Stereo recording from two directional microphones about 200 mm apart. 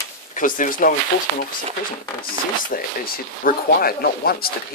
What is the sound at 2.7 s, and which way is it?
Speech, 45° left (ahead or behind).